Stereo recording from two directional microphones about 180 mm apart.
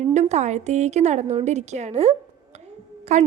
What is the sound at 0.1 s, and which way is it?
A woman's voice, 40° right (ahead or behind).